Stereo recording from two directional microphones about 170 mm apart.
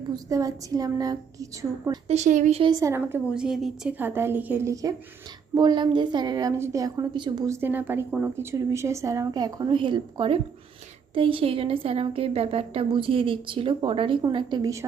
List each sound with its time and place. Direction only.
0.3 s a woman's voice: 20° right (ahead or behind)
2.0 s speech: 40° right (ahead or behind)
2.6 s a woman's voice: 25° right (ahead or behind)
3.3 s a woman's voice: 5° right (ahead or behind); by 14.8 s 20° right (ahead or behind)